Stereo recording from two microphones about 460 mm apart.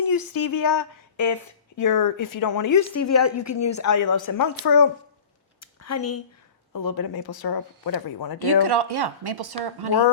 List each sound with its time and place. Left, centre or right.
0.1 s speech: left
5.5 s a sound: left
6.7 s speech: left
8.4 s speech: right